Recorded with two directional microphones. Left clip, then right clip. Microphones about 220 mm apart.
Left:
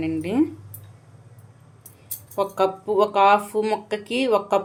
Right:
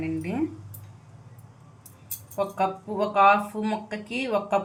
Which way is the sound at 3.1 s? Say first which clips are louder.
Even; 40° left (ahead or behind).